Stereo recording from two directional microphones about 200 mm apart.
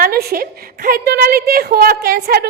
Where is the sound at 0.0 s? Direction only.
50° right (ahead or behind).